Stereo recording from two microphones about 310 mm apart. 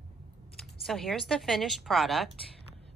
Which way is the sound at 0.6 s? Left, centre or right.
Centre.